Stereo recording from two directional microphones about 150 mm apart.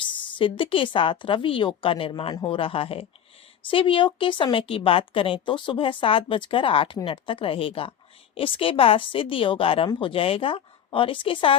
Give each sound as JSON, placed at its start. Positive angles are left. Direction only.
{"t": 0.0, "sound": "a woman's voice", "side_deg": 35}